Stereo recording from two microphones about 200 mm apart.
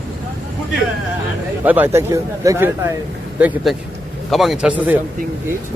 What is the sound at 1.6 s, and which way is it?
A man's voice, 10° right (ahead or behind).